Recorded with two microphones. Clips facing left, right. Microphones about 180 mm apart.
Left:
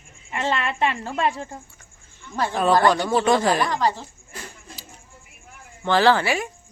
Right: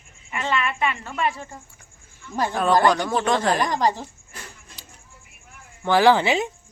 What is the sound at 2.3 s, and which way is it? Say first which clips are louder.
Speech: right 1 dB; 10° right (ahead or behind).